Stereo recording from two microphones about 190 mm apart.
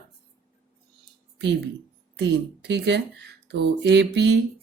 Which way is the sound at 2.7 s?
60° right (ahead or behind).